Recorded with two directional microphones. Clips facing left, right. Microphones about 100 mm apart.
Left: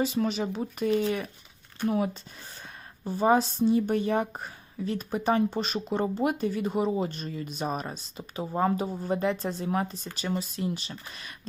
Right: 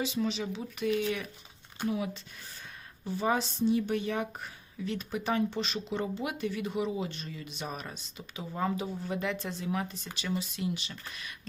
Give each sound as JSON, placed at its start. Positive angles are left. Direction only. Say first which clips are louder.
{"t": 0.0, "sound": "speech", "louder": "left 5 dB", "side_deg": 45}
{"t": 3.0, "sound": "a woman's voice", "louder": "left 7 dB", "side_deg": 45}